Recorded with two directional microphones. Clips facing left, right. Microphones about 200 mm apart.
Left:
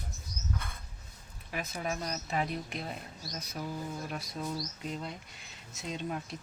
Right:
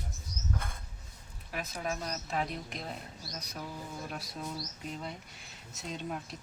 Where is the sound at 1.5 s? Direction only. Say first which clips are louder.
Left 1 dB; 5° left (ahead or behind).